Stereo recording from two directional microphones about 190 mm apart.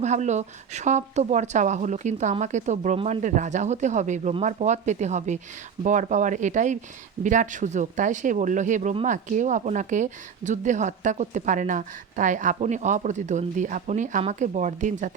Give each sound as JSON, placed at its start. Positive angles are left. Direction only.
{"t": 0.0, "sound": "speech", "side_deg": -40}